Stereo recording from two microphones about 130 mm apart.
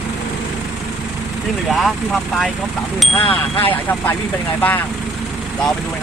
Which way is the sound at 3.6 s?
15° left (ahead or behind).